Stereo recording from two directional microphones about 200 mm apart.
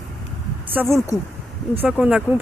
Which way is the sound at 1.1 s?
15° right (ahead or behind).